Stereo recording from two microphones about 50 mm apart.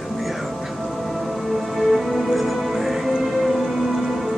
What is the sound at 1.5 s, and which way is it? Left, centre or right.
Music, centre.